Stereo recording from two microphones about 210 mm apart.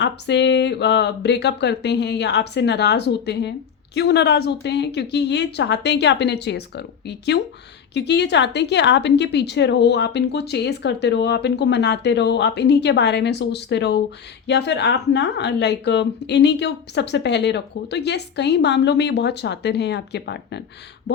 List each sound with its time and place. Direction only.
0.0 s a woman's voice: 55° left (ahead or behind)